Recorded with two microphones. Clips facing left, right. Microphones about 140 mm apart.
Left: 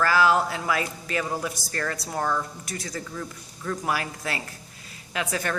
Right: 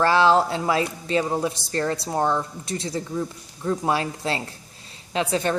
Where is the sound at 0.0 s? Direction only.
30° right (ahead or behind).